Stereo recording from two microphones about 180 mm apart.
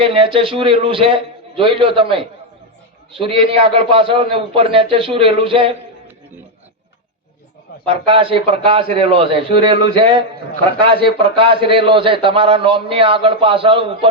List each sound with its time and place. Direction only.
0.0 s a man's voice: 30° right (ahead or behind)
7.9 s a man's voice: 30° right (ahead or behind)